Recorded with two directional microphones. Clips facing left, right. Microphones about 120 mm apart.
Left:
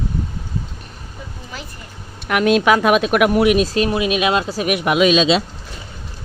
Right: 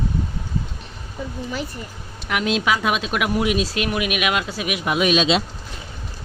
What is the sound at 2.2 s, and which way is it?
Speech, 55° left (ahead or behind).